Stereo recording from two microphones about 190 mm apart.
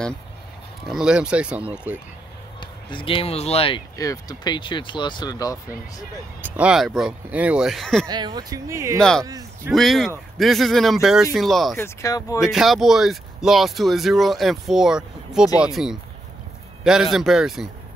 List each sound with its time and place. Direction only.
0.8 s speech: 5° right (ahead or behind)
2.6 s speech: 25° left (ahead or behind)
3.9 s speech: 15° left (ahead or behind)
6.4 s speech: 5° right (ahead or behind)
8.1 s speech: 20° right (ahead or behind)
9.7 s speech: centre (ahead or behind)
11.7 s speech: 15° left (ahead or behind)
12.4 s speech: centre (ahead or behind)